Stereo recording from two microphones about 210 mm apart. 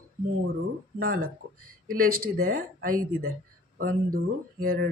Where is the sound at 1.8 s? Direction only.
45° right (ahead or behind).